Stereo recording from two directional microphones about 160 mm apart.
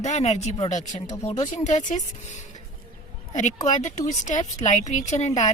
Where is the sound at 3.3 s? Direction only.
50° left (ahead or behind).